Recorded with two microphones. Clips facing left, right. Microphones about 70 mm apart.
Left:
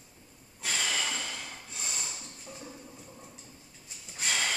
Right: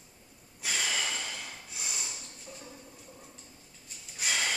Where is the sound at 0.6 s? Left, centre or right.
Centre.